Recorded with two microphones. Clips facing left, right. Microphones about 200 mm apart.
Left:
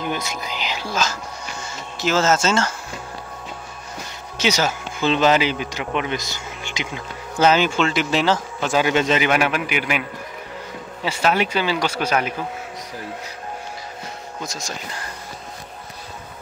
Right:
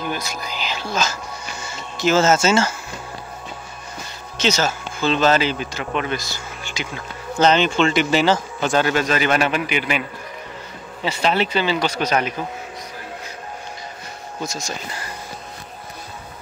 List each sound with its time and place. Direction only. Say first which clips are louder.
0.0 s speech: left 1 dB; 20° left (ahead or behind)
1.6 s speech: right 4 dB; centre (ahead or behind)
4.4 s speech: even; 15° left (ahead or behind)
7.3 s speech: right 1 dB; 5° left (ahead or behind)
8.8 s speech: left 1 dB; 20° left (ahead or behind)
11.1 s speech: even; 10° left (ahead or behind)
14.4 s speech: right 4 dB; centre (ahead or behind)